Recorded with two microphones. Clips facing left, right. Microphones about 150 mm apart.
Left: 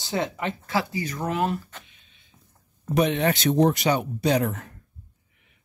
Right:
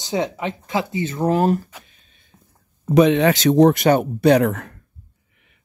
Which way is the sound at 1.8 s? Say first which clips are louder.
Right 2 dB; 40° right (ahead or behind).